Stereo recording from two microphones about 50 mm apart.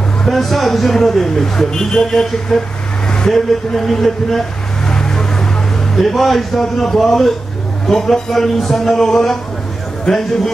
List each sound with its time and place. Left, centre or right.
0.3 s speech: centre
3.1 s vehicle: centre
5.9 s a man's voice: centre